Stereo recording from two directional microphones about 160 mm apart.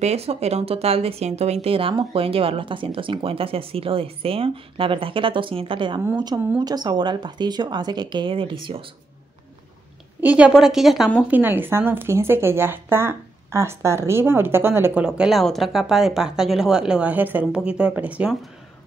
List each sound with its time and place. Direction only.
0.0 s speech: 40° right (ahead or behind)
10.2 s a woman's voice: 10° right (ahead or behind)